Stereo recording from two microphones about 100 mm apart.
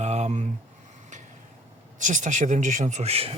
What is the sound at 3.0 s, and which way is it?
Speech, 90° right.